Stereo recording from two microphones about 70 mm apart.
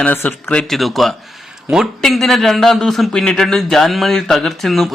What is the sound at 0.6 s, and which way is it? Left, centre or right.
A man's voice, centre.